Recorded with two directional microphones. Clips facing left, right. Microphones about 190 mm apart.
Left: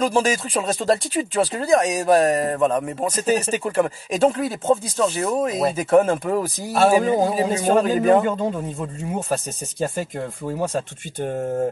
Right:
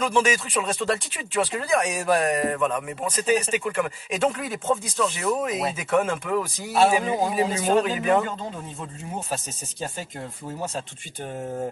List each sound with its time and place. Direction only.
0.0 s speech: 35° left (ahead or behind)